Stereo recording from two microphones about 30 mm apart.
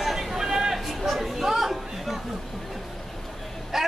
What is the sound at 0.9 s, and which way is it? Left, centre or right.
Chatter, centre.